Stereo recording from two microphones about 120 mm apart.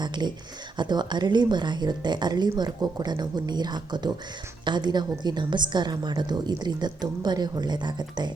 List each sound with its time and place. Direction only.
0.0 s a woman's voice: 40° right (ahead or behind)